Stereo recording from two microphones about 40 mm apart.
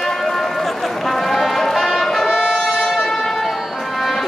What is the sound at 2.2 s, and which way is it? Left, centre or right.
Brass instrument, centre.